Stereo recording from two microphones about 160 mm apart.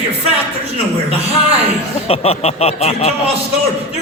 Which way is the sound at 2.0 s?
40° left (ahead or behind).